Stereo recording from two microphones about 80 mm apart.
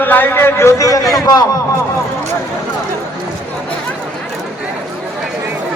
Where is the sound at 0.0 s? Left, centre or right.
Left.